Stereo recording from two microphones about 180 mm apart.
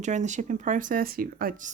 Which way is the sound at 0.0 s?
40° right (ahead or behind).